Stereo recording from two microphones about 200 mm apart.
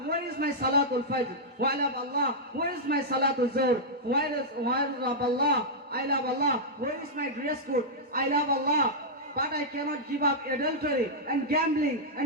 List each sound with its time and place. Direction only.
0.3 s a man's voice: 50° right (ahead or behind)